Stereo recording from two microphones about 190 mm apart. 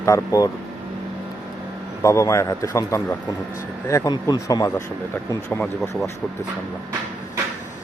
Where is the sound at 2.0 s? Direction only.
15° left (ahead or behind).